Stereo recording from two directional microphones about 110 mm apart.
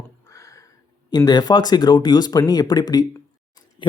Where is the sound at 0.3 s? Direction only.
30° left (ahead or behind).